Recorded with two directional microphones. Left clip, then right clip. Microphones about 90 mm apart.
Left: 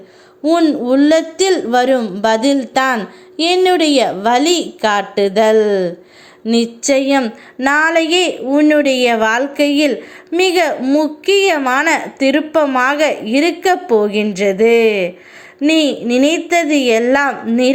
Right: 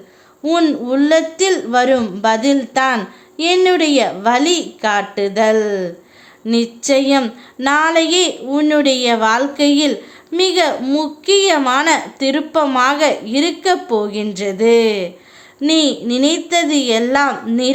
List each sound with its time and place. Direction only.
0.4 s speech: 15° left (ahead or behind)
0.9 s a woman's voice: 35° left (ahead or behind)
6.5 s a woman's voice: 30° left (ahead or behind)
10.8 s speech: 15° left (ahead or behind)
11.3 s a woman's voice: 25° left (ahead or behind)